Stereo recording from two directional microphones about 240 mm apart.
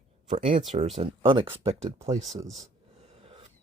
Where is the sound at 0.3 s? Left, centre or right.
Right.